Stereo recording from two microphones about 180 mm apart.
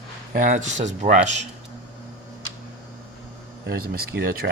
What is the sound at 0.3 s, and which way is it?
Speech, 45° right (ahead or behind).